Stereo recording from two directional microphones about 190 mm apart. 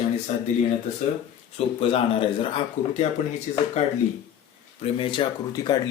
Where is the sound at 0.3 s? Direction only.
35° left (ahead or behind).